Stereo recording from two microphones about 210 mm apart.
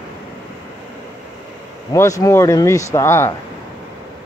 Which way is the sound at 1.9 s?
15° left (ahead or behind).